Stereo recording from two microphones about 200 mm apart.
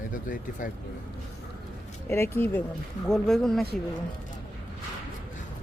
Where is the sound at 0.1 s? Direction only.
40° left (ahead or behind).